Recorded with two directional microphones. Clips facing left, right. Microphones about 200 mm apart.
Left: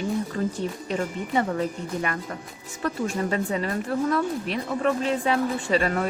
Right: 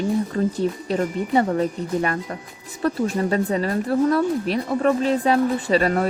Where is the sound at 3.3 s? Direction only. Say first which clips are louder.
Right 5 dB; 35° right (ahead or behind).